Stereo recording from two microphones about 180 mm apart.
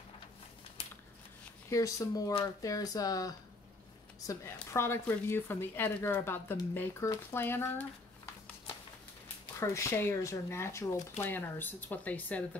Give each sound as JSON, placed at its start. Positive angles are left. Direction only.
{"t": 1.7, "sound": "speech", "side_deg": 15}
{"t": 9.6, "sound": "speech", "side_deg": 15}